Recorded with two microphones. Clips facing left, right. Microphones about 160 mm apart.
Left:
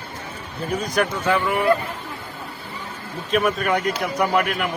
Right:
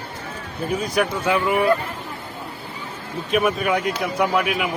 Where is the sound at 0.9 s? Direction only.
10° right (ahead or behind).